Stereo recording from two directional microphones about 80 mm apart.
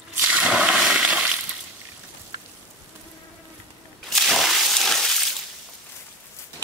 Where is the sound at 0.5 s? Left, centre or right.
Centre.